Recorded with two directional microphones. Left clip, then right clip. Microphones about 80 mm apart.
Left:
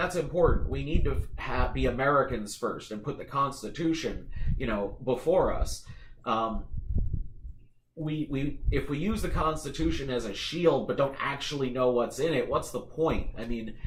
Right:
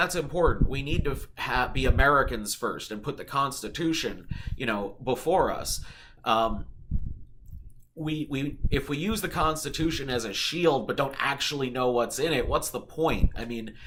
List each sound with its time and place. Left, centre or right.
0.0 s speech: right
8.0 s speech: right